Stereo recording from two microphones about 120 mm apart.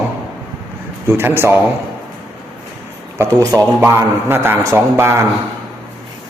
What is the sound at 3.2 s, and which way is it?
A man's voice, 30° right (ahead or behind).